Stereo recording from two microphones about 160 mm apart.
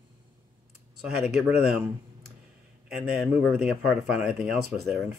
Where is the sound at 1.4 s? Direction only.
5° right (ahead or behind).